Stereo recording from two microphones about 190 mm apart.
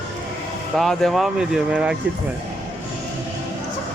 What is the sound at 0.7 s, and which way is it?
Speech, centre (ahead or behind).